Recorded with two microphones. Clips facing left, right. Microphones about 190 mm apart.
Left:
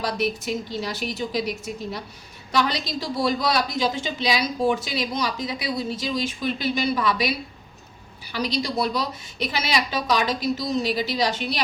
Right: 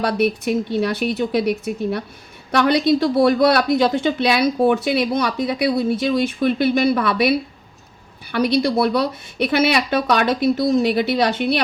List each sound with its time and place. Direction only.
0.0 s a woman's voice: 60° right (ahead or behind)